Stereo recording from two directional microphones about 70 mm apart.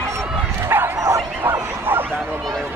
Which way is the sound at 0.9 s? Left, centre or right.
Right.